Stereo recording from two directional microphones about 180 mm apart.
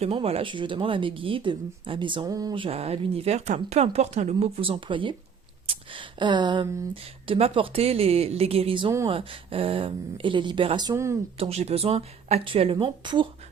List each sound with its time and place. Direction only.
0.0 s speech: 35° right (ahead or behind); by 11.2 s 15° right (ahead or behind)
11.3 s speech: 35° right (ahead or behind)